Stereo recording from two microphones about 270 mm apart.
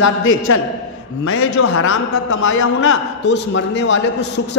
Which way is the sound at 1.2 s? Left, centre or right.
Left.